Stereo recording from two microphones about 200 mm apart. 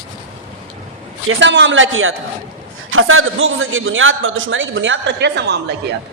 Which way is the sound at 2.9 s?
90° right.